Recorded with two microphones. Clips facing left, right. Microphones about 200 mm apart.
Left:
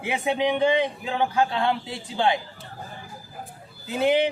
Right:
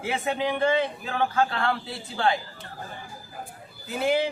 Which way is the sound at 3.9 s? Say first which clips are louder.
Left 3 dB; 20° left (ahead or behind).